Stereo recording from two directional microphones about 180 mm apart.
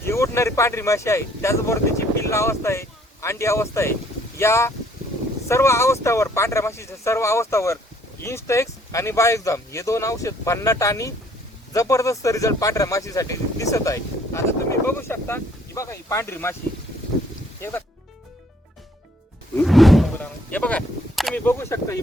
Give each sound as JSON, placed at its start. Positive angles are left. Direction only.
{"t": 0.0, "sound": "speech", "side_deg": 15}
{"t": 17.6, "sound": "speech", "side_deg": 10}
{"t": 19.6, "sound": "a sound", "side_deg": 0}
{"t": 20.1, "sound": "speech", "side_deg": 10}